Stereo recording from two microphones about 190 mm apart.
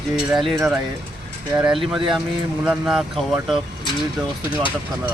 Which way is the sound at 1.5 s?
5° right (ahead or behind).